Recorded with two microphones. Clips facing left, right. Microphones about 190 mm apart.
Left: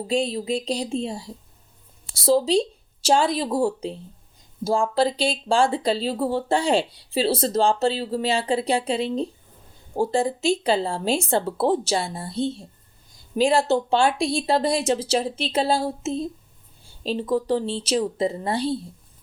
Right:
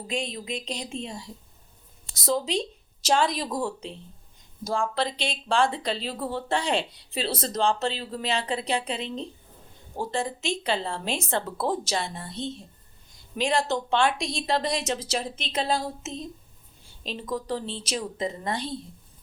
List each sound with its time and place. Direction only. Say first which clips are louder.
0.1 s speech: left 8 dB; 35° left (ahead or behind)